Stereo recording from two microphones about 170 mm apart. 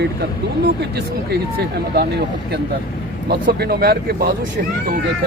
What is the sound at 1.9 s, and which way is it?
Speech, 70° right (ahead or behind).